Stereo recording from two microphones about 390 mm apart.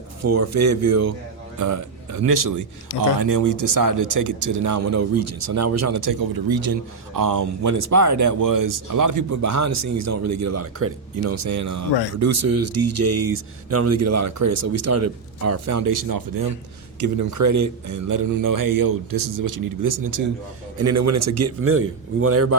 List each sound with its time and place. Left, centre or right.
0.2 s speech: right
6.1 s speech: right
20.7 s speech: right